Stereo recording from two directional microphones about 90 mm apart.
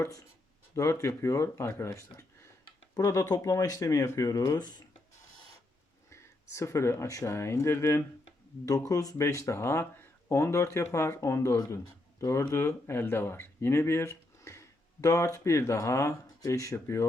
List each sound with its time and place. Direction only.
0.0 s speech: 40° left (ahead or behind)
6.1 s speech: 30° left (ahead or behind)